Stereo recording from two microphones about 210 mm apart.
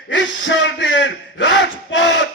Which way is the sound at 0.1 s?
60° left (ahead or behind).